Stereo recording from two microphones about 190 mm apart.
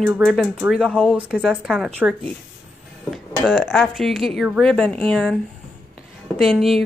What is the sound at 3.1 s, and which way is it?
Speech, centre (ahead or behind).